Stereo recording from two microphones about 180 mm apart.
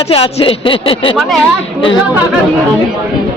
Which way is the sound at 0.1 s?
30° left (ahead or behind).